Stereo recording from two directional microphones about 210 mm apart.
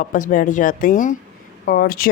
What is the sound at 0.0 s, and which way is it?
Speech, 40° left (ahead or behind).